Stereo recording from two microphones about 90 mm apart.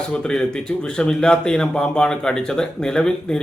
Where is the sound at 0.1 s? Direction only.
10° left (ahead or behind).